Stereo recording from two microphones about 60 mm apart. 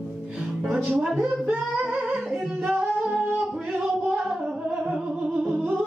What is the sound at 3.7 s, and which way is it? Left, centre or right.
Music, centre.